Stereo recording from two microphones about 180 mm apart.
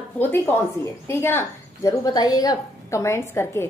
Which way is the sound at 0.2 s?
10° left (ahead or behind).